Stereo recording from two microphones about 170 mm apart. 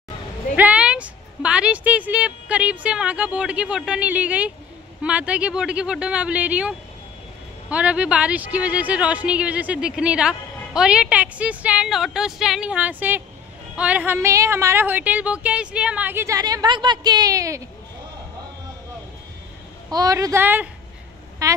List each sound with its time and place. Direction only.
0.6 s a woman's voice: 5° right (ahead or behind)
19.9 s a woman's voice: 20° right (ahead or behind)